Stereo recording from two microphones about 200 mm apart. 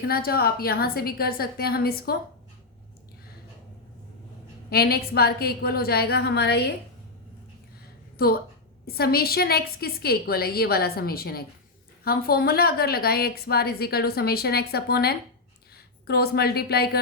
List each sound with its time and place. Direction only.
0.1 s a woman's voice: 50° left (ahead or behind)
4.7 s a woman's voice: 50° left (ahead or behind)
8.9 s a woman's voice: 50° left (ahead or behind)